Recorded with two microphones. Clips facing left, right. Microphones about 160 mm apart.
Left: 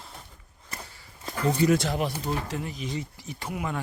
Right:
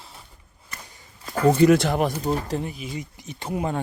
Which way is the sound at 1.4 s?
60° right (ahead or behind).